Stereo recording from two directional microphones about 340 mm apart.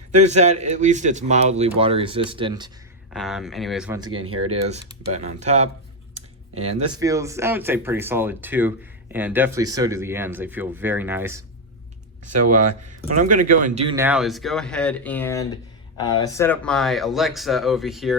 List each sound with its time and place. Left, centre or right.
0.3 s a man's voice: centre
3.1 s speech: centre
4.1 s speech: right
4.4 s a man's voice: centre
13.1 s speech: right
13.4 s a man's voice: right
13.9 s speech: centre